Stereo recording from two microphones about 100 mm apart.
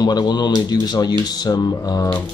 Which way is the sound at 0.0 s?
45° left (ahead or behind).